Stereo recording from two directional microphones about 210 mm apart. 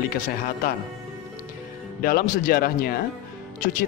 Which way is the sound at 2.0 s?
45° left (ahead or behind).